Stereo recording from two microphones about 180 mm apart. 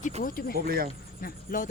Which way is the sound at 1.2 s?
50° left (ahead or behind).